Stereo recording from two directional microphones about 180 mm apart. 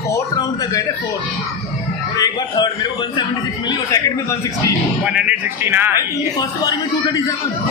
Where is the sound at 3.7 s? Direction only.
20° left (ahead or behind).